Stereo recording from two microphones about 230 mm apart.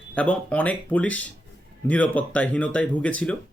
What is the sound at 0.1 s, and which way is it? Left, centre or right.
A man's voice, centre.